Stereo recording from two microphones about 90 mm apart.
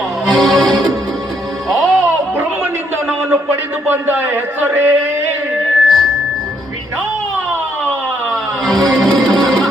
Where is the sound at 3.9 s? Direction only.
25° right (ahead or behind).